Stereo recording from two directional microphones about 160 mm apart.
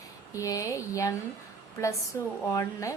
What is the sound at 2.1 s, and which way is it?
Speech, 20° left (ahead or behind).